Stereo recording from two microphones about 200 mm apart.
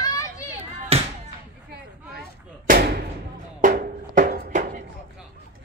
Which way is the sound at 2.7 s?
50° right (ahead or behind).